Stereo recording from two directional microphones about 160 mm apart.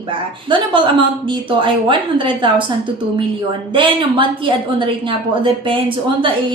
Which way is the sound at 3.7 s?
30° right (ahead or behind).